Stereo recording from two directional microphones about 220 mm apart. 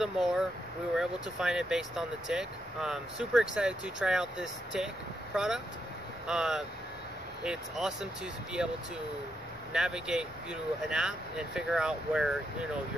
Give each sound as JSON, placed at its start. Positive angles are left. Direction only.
{"t": 0.0, "sound": "speech", "side_deg": 0}
{"t": 9.7, "sound": "speech", "side_deg": -5}